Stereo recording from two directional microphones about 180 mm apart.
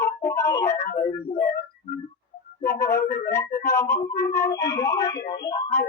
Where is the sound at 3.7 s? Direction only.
15° left (ahead or behind).